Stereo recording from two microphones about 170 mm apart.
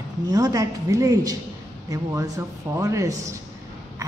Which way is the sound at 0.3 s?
20° right (ahead or behind).